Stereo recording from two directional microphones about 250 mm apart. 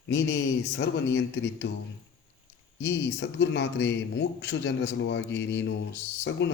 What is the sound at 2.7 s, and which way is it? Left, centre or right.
A man's voice, left.